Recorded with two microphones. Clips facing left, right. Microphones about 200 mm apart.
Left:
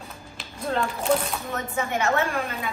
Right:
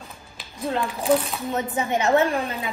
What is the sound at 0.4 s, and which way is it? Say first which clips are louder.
Speech: right 1 dB; centre (ahead or behind).